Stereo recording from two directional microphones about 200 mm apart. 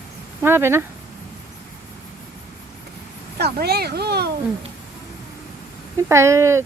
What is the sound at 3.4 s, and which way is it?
Speech, 55° right (ahead or behind).